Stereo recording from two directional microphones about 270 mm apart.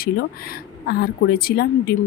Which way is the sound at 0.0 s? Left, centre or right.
Left.